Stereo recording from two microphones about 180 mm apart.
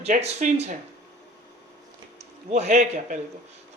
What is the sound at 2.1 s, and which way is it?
A man's voice, 40° right (ahead or behind).